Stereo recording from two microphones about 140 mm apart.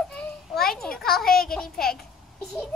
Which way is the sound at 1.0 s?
90° left.